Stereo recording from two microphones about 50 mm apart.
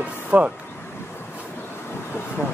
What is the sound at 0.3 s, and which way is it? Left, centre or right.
Speech, right.